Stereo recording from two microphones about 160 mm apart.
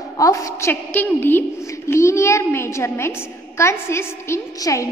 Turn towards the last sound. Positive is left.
turn(degrees=20)  # may be behind; listen again after turning